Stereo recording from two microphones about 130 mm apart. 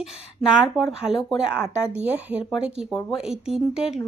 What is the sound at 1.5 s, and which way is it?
Speech, 20° left (ahead or behind).